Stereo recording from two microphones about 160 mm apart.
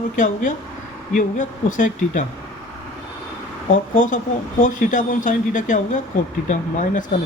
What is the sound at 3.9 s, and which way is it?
Speech, 55° left (ahead or behind).